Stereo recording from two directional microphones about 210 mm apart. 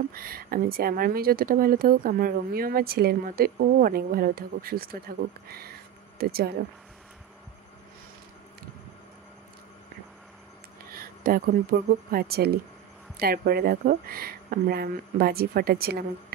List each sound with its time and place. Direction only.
0.1 s speech: 45° right (ahead or behind)
10.9 s a sound: 45° right (ahead or behind)
12.1 s speech: 45° right (ahead or behind)